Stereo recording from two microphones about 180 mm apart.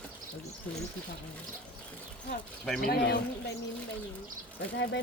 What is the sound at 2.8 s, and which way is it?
Speech, 60° left (ahead or behind).